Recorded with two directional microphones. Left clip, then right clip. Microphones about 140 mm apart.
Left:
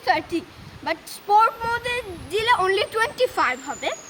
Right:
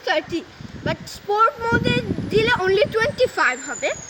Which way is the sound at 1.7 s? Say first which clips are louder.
Right 4 dB; 20° left (ahead or behind).